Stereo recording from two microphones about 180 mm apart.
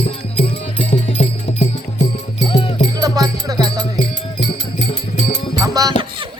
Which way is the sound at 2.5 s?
30° left (ahead or behind).